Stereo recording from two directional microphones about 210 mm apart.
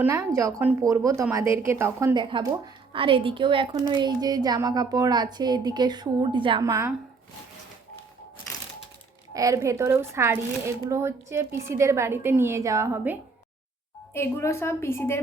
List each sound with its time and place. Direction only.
0.0 s a woman's voice: 10° right (ahead or behind)
9.3 s a woman's voice: 15° right (ahead or behind)
14.1 s a woman's voice: 10° left (ahead or behind)